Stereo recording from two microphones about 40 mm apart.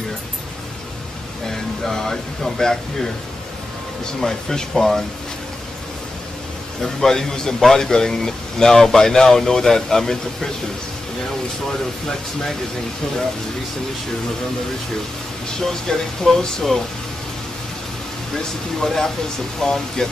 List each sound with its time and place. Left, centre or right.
1.5 s speech: centre
6.8 s speech: centre
15.6 s speech: centre
18.3 s speech: centre